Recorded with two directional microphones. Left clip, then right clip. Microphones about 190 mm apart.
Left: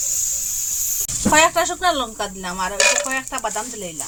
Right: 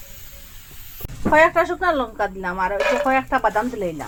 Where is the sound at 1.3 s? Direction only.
15° right (ahead or behind).